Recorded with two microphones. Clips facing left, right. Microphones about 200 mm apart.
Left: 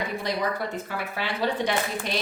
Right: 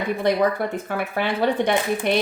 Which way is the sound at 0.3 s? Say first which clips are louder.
Right 9 dB; 55° right (ahead or behind).